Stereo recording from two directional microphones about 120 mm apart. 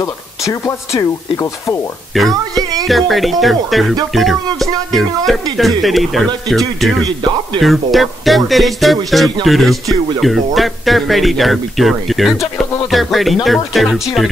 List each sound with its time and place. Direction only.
0.0 s speech: 30° left (ahead or behind)
2.1 s speech: centre (ahead or behind)